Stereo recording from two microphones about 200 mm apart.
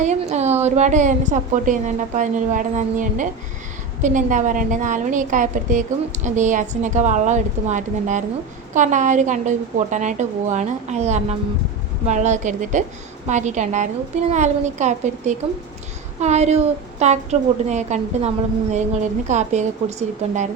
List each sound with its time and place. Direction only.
0.0 s a woman's voice: 35° right (ahead or behind)
19.3 s a woman's voice: 35° right (ahead or behind)